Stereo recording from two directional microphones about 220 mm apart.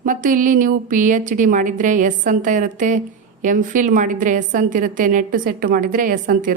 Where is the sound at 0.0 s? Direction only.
35° right (ahead or behind).